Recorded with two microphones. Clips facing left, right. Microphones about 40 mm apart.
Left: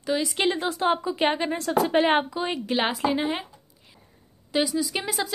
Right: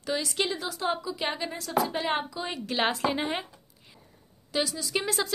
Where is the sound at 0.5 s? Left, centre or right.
Left.